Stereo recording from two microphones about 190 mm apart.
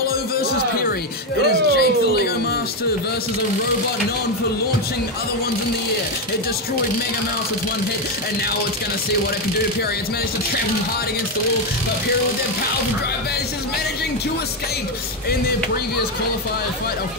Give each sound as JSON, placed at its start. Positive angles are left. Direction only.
{"t": 0.0, "sound": "music", "side_deg": 50}
{"t": 1.4, "sound": "speech", "side_deg": 55}